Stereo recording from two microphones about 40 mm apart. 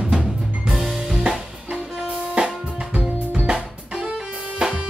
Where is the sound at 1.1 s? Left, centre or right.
Centre.